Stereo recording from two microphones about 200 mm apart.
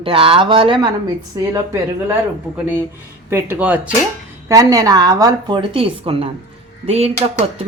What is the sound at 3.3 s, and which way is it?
Speech, 10° right (ahead or behind).